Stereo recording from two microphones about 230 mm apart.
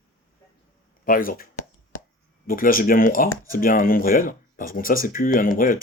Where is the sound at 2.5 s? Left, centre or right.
Left.